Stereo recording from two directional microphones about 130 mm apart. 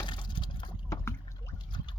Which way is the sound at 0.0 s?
35° left (ahead or behind).